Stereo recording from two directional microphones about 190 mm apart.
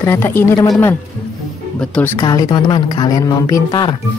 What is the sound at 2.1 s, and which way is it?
Speech, 20° left (ahead or behind).